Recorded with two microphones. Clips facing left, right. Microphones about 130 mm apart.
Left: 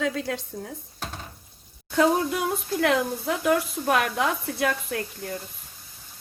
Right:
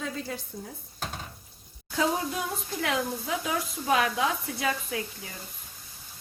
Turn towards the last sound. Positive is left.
turn(degrees=60)  # may be behind; listen again after turning